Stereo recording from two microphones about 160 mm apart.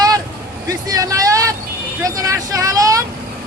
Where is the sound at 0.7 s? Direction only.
20° right (ahead or behind).